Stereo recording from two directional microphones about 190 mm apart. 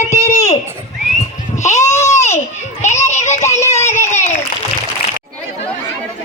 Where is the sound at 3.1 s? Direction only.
35° left (ahead or behind).